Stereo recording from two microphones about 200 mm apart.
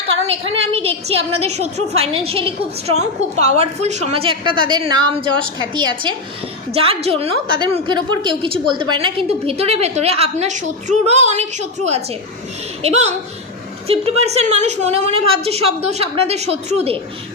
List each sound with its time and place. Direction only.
0.2 s a woman's voice: 30° right (ahead or behind)